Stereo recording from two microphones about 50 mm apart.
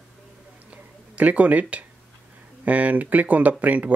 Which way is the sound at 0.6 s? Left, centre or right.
Right.